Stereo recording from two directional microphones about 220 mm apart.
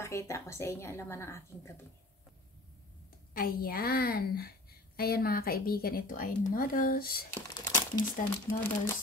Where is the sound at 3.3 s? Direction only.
40° left (ahead or behind).